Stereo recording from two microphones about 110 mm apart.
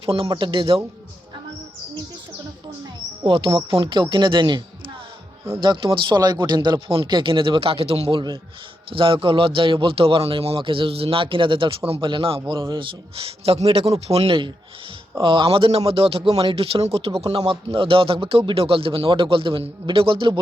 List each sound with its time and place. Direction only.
0.0 s speech: 50° right (ahead or behind)
3.2 s speech: 50° right (ahead or behind)
8.9 s a man's voice: 50° right (ahead or behind)
16.8 s a man's voice: 65° right (ahead or behind)